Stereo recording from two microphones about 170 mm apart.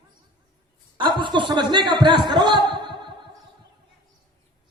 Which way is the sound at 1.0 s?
25° right (ahead or behind).